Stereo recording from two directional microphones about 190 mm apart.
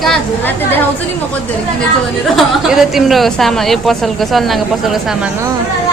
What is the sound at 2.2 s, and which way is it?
A woman's voice, centre (ahead or behind).